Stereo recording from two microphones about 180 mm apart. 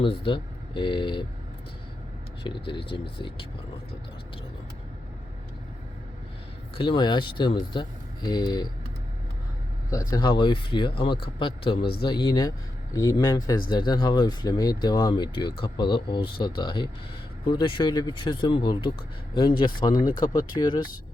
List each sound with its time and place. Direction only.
0.3 s speech: 25° left (ahead or behind)
2.6 s speech: 30° left (ahead or behind)
6.7 s speech: 25° left (ahead or behind)
10.1 s speech: 25° left (ahead or behind)